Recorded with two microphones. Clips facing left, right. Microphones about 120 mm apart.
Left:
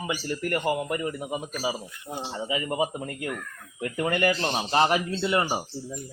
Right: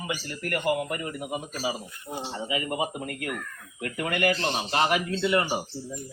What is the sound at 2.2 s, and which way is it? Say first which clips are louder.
A man's voice: left 1 dB; 30° left (ahead or behind).